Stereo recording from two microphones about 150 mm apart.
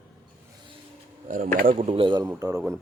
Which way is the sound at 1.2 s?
70° right (ahead or behind).